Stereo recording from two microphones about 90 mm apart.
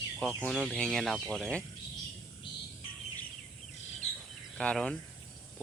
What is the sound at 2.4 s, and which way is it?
Bird, 70° left (ahead or behind).